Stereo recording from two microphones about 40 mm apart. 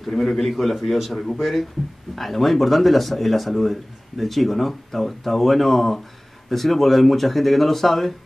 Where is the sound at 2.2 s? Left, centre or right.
Centre.